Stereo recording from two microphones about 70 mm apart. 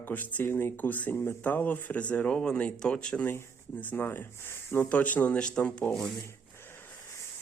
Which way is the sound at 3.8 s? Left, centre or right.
Left.